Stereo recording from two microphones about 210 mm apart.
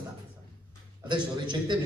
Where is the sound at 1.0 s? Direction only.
20° right (ahead or behind).